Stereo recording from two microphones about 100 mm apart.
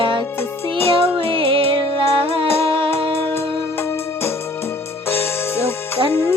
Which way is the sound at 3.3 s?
25° left (ahead or behind).